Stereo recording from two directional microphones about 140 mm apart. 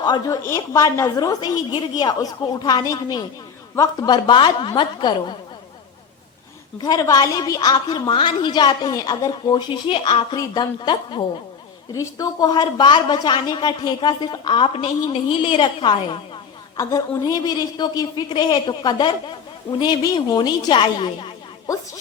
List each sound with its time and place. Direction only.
0.0 s a woman's voice: 30° left (ahead or behind)
0.4 s a woman's voice: 20° left (ahead or behind)
6.8 s a woman's voice: 25° left (ahead or behind)